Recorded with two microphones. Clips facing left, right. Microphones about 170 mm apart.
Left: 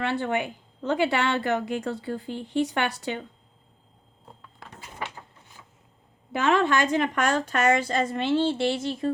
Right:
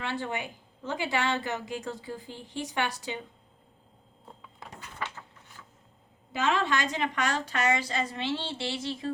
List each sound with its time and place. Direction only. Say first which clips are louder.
0.0 s a woman's voice: left 7 dB; 60° left (ahead or behind)
4.9 s a sound: left 2 dB; 15° left (ahead or behind)
6.3 s a woman's voice: left 5 dB; 55° left (ahead or behind)